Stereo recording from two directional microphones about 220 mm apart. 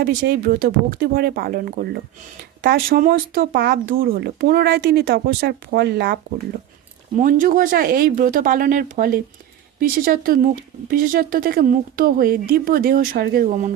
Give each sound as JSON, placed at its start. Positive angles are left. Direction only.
{"t": 0.0, "sound": "speech", "side_deg": -40}
{"t": 7.2, "sound": "speech", "side_deg": -35}